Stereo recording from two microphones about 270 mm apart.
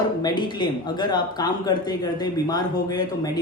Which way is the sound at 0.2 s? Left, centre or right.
Centre.